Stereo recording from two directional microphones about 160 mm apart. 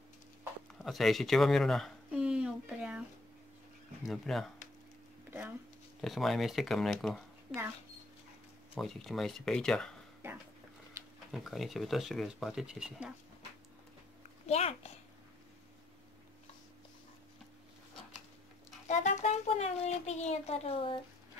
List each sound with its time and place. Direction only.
0.8 s speech: centre (ahead or behind)
4.0 s speech: centre (ahead or behind)
5.9 s speech: centre (ahead or behind)
8.7 s speech: centre (ahead or behind)
11.3 s speech: centre (ahead or behind)
14.4 s a child's voice: 40° left (ahead or behind)
18.9 s a sound: 45° left (ahead or behind)